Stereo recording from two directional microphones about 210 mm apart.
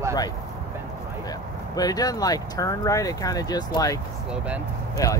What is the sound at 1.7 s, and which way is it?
Speech, 15° left (ahead or behind).